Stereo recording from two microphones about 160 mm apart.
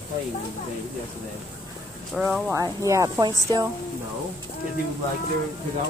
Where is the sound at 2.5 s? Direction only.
20° right (ahead or behind).